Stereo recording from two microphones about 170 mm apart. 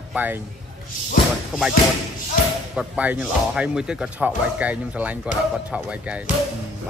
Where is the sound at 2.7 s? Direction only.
10° right (ahead or behind).